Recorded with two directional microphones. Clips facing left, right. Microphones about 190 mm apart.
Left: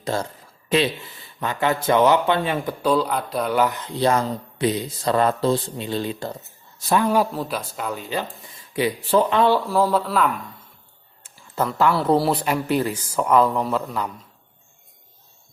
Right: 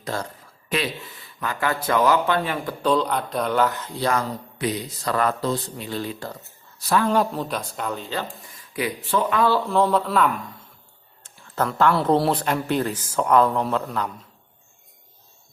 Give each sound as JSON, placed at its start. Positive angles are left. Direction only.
{"t": 0.0, "sound": "speech", "side_deg": 25}
{"t": 1.4, "sound": "speech", "side_deg": 25}
{"t": 2.8, "sound": "speech", "side_deg": 5}
{"t": 8.7, "sound": "speech", "side_deg": 30}
{"t": 9.6, "sound": "speech", "side_deg": 5}